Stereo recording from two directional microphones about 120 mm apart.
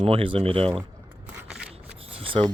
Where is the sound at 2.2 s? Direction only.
50° right (ahead or behind).